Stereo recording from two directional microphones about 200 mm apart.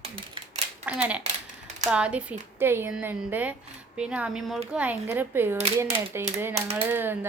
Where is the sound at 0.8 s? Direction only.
5° right (ahead or behind).